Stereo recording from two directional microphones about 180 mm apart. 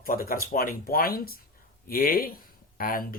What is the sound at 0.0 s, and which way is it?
Speech, 55° left (ahead or behind).